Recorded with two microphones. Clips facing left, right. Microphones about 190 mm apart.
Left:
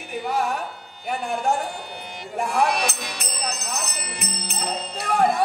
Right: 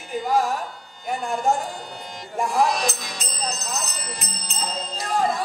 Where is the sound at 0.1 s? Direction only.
65° left (ahead or behind).